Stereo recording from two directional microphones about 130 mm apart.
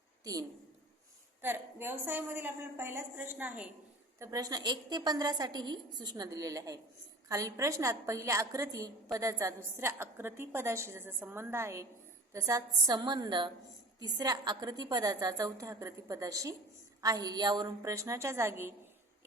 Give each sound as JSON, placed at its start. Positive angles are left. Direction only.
{"t": 1.4, "sound": "a woman's voice", "side_deg": -15}
{"t": 4.2, "sound": "a woman's voice", "side_deg": -25}